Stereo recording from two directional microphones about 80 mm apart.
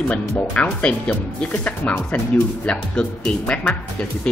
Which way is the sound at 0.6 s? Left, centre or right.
Centre.